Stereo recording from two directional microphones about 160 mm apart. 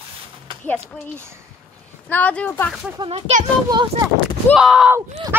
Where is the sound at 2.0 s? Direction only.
10° left (ahead or behind).